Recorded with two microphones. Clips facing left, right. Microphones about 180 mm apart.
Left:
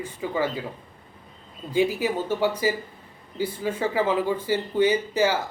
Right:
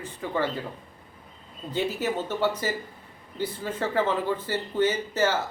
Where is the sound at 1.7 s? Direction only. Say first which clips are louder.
Left 4 dB; 10° left (ahead or behind).